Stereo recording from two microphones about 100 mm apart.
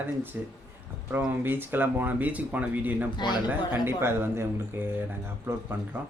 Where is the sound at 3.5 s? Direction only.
25° right (ahead or behind).